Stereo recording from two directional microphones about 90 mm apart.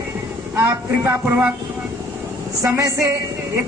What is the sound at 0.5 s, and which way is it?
Speech, 30° right (ahead or behind).